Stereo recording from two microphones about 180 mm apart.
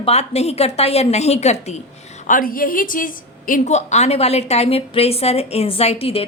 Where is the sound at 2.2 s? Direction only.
50° left (ahead or behind).